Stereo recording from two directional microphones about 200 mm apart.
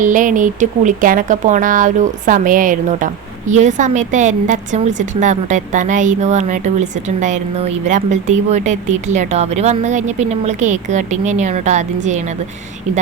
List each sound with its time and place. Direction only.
0.0 s speech: 40° right (ahead or behind)